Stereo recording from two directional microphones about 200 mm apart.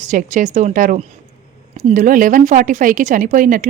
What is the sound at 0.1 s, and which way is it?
A woman's voice, 40° right (ahead or behind).